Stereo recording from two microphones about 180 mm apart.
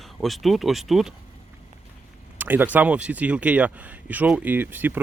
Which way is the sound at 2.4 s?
10° right (ahead or behind).